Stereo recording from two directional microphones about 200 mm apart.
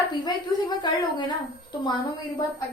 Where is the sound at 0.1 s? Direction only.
20° left (ahead or behind).